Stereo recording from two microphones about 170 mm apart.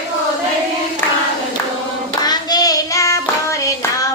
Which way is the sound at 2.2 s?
25° left (ahead or behind).